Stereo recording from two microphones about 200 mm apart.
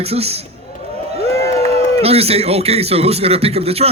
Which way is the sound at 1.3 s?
15° left (ahead or behind).